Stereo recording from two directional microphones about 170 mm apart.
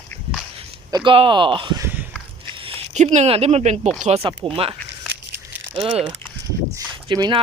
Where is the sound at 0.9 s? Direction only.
25° right (ahead or behind).